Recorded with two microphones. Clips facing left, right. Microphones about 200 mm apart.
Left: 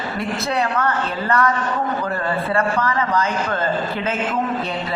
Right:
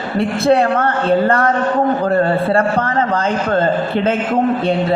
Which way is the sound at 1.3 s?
50° right (ahead or behind).